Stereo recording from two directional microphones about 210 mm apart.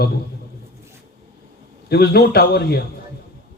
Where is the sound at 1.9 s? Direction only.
50° left (ahead or behind).